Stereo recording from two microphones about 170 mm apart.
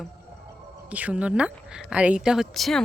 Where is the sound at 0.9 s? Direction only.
10° right (ahead or behind).